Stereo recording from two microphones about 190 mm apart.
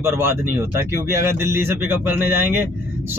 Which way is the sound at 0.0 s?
10° right (ahead or behind).